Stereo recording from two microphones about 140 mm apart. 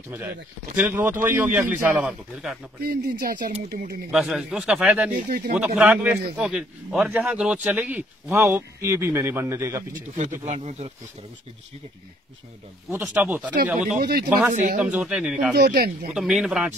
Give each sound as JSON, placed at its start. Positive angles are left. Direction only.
{"t": 0.7, "sound": "a man's voice", "side_deg": -15}
{"t": 2.8, "sound": "speech", "side_deg": -90}
{"t": 4.1, "sound": "a man's voice", "side_deg": 0}
{"t": 5.1, "sound": "speech", "side_deg": -75}
{"t": 5.8, "sound": "a man's voice", "side_deg": -10}
{"t": 10.4, "sound": "speech", "side_deg": -50}
{"t": 13.0, "sound": "a man's voice", "side_deg": -10}
{"t": 13.7, "sound": "speech", "side_deg": -60}
{"t": 14.9, "sound": "a man's voice", "side_deg": -10}
{"t": 15.7, "sound": "speech", "side_deg": -90}
{"t": 16.2, "sound": "a man's voice", "side_deg": -5}